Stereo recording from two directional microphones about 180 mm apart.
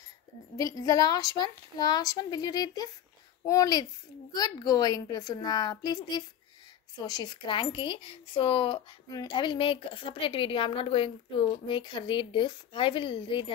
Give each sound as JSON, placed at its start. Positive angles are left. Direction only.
{"t": 0.6, "sound": "speech", "side_deg": 20}